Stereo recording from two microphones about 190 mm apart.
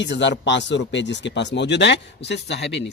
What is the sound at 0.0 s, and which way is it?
Speech, 70° left (ahead or behind).